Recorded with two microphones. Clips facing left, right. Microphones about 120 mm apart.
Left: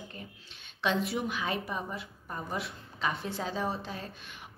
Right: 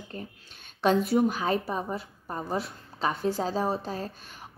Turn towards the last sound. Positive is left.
turn(degrees=-40)  # may be behind; listen again after turning